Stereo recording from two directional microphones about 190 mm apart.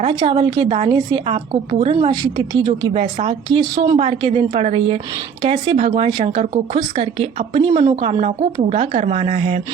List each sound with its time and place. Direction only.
0.0 s a woman's voice: 25° right (ahead or behind)
3.6 s a woman's voice: 20° right (ahead or behind)
3.9 s a woman's voice: 30° right (ahead or behind)